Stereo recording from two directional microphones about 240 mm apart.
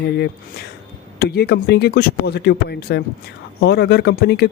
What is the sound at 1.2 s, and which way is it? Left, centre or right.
Speech, left.